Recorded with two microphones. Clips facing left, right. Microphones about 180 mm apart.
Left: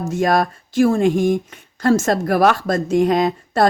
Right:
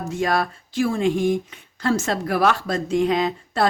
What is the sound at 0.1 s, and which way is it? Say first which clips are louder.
Speech: left 5 dB; 45° left (ahead or behind).